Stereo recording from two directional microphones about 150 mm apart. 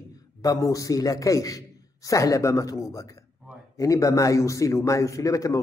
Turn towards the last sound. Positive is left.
turn(degrees=20)  # may be behind; listen again after turning